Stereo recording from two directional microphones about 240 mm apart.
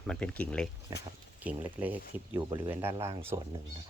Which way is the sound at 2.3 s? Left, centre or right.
Centre.